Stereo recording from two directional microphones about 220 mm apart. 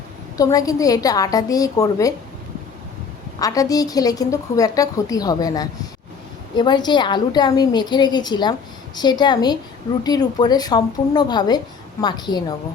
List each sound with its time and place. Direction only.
0.3 s a woman's voice: 15° left (ahead or behind)
3.4 s a woman's voice: 15° left (ahead or behind)